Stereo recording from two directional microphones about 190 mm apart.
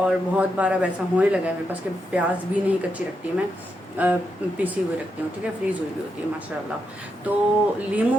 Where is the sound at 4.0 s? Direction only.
10° right (ahead or behind).